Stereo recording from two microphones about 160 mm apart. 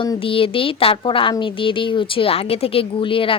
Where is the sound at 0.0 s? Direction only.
30° left (ahead or behind).